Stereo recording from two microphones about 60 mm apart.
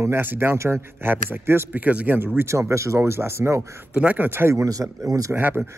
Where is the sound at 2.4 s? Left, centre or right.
Right.